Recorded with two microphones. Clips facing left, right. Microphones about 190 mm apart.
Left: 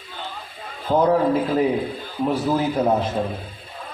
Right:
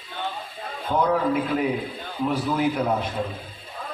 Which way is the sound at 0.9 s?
30° left (ahead or behind).